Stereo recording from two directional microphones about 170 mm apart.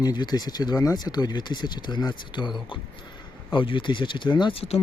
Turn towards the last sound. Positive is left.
turn(degrees=35)  # may be behind; listen again after turning